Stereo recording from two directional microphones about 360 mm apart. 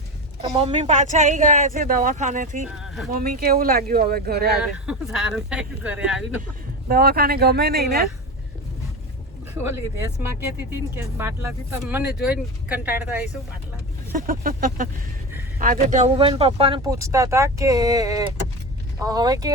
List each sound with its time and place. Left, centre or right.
0.5 s speech: centre
2.7 s a sound: centre
3.1 s speech: right
4.6 s speech: centre
6.8 s speech: right
9.6 s speech: centre
14.2 s speech: right